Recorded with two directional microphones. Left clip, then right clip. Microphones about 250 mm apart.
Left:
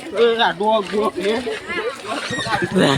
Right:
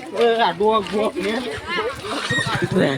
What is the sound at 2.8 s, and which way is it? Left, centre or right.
Speech, centre.